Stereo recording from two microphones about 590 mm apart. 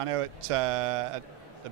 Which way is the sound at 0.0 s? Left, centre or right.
Right.